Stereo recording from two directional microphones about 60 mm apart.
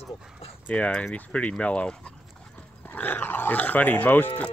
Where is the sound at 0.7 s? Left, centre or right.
Centre.